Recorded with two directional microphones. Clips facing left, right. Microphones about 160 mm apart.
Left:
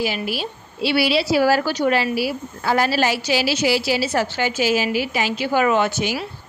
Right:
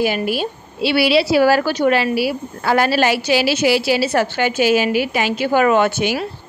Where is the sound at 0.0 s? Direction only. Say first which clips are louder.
Right 5 dB; 55° right (ahead or behind).